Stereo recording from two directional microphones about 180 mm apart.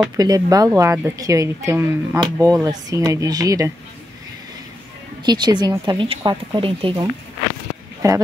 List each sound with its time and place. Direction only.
0.2 s a woman's voice: 20° right (ahead or behind)
5.2 s a woman's voice: 25° right (ahead or behind)